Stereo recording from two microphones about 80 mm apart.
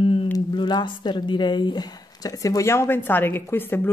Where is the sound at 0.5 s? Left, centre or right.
Left.